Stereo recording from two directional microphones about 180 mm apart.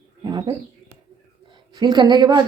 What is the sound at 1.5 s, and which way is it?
Speech, 25° right (ahead or behind).